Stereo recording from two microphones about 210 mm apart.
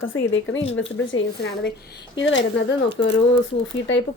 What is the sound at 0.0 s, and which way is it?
Speech, 70° left (ahead or behind).